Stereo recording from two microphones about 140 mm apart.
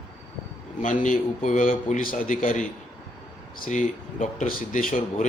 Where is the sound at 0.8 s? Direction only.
65° left (ahead or behind).